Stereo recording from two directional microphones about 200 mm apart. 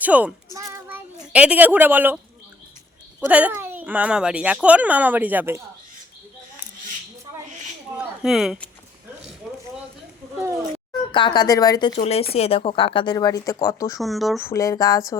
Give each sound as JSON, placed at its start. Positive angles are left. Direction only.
{"t": 0.0, "sound": "a child's voice", "side_deg": -5}
{"t": 3.2, "sound": "speech", "side_deg": -5}
{"t": 7.9, "sound": "speech", "side_deg": -5}
{"t": 9.5, "sound": "a sound", "side_deg": 0}
{"t": 11.1, "sound": "speech", "side_deg": 25}
{"t": 11.9, "sound": "speech", "side_deg": 30}
{"t": 14.0, "sound": "speech", "side_deg": 0}
{"t": 14.3, "sound": "speech", "side_deg": 15}